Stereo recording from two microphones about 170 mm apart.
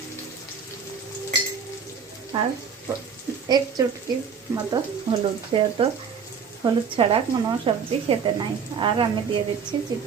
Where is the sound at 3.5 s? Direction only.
25° right (ahead or behind).